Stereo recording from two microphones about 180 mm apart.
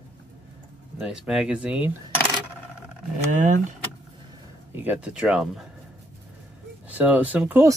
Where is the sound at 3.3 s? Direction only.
45° right (ahead or behind).